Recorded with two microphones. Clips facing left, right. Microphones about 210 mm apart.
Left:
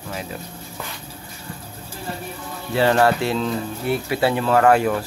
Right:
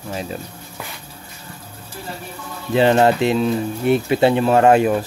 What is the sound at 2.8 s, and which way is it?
Speech, 20° right (ahead or behind).